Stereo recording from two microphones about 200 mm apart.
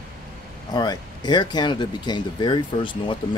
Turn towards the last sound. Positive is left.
turn(degrees=25)  # may be behind; listen again after turning